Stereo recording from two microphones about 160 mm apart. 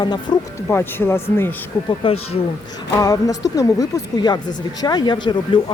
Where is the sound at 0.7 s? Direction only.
15° left (ahead or behind).